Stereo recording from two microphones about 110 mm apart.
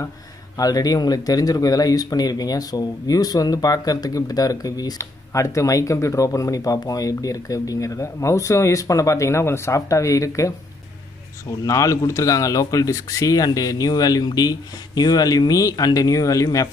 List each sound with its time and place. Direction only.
0.6 s speech: 35° left (ahead or behind)
11.6 s speech: 30° left (ahead or behind)